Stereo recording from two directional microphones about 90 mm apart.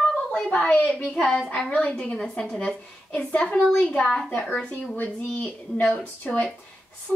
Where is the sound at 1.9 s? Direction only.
10° left (ahead or behind).